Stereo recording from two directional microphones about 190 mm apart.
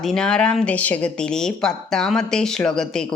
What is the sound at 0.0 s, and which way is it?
A woman's voice, 5° left (ahead or behind).